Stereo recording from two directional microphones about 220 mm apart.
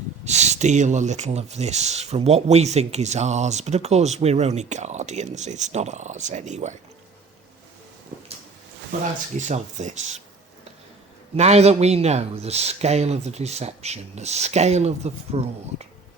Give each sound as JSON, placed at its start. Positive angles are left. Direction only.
{"t": 0.3, "sound": "speech", "side_deg": -30}
{"t": 9.5, "sound": "speech", "side_deg": -35}
{"t": 11.3, "sound": "speech", "side_deg": -30}